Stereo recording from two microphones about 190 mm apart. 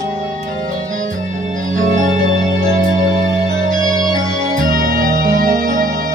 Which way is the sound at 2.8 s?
40° right (ahead or behind).